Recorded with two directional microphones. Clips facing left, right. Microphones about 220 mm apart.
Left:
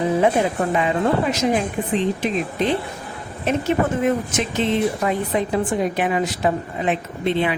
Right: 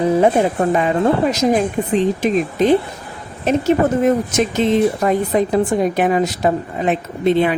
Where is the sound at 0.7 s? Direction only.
40° right (ahead or behind).